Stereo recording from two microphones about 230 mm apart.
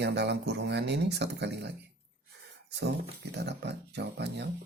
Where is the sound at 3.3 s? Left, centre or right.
Right.